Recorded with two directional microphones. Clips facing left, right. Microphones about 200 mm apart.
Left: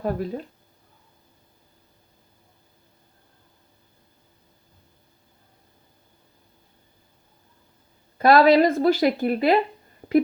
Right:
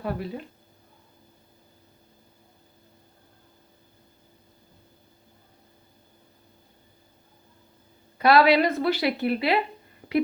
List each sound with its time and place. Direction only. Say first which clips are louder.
0.0 s a woman's voice: left 4 dB; 45° left (ahead or behind)
8.2 s a woman's voice: left 3 dB; 45° left (ahead or behind)